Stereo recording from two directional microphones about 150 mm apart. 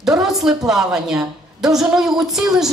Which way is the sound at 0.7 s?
5° right (ahead or behind).